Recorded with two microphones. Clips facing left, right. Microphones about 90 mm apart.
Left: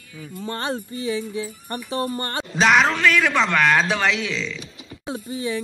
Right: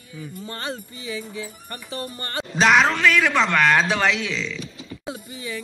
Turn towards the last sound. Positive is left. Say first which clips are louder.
# left 6 dB
turn(degrees=35)  # may be behind; listen again after turning